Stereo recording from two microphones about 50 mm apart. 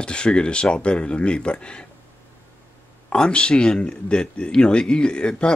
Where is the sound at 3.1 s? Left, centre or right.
Left.